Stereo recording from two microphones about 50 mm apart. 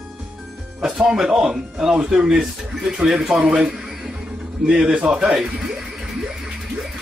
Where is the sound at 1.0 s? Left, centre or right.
Centre.